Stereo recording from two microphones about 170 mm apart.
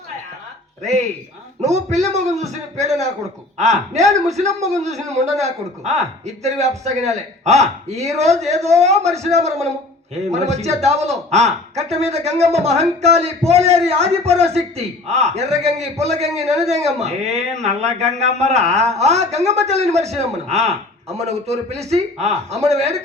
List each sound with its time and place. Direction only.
1.6 s speech: 40° right (ahead or behind)